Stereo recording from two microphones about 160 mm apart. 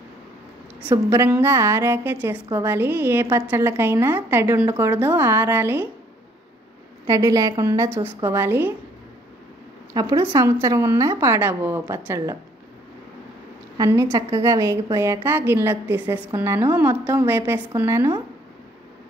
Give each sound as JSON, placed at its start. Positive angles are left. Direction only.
{"t": 1.1, "sound": "a woman's voice", "side_deg": -15}
{"t": 7.1, "sound": "a woman's voice", "side_deg": -20}
{"t": 9.9, "sound": "a woman's voice", "side_deg": -25}
{"t": 13.7, "sound": "a woman's voice", "side_deg": -20}